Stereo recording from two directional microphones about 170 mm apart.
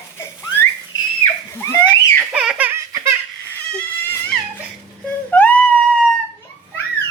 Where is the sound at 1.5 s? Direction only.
15° left (ahead or behind).